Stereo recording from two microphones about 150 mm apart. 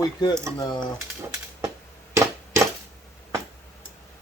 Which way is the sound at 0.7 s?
30° left (ahead or behind).